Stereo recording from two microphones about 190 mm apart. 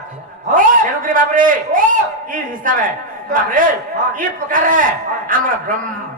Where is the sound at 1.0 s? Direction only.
45° right (ahead or behind).